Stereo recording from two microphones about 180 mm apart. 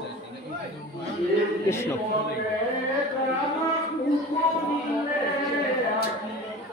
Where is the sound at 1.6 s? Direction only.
15° left (ahead or behind).